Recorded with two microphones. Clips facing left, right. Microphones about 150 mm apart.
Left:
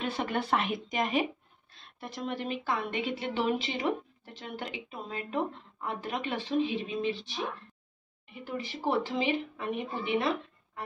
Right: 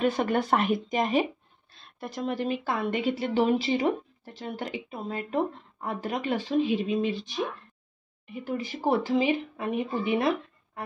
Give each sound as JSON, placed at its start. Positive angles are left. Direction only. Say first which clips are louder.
{"t": 0.0, "sound": "speech", "louder": "right 7 dB", "side_deg": -45}
{"t": 8.5, "sound": "speech", "louder": "right 5 dB", "side_deg": -45}